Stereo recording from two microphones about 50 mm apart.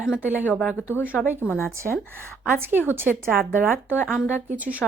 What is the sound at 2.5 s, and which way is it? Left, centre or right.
Speech, right.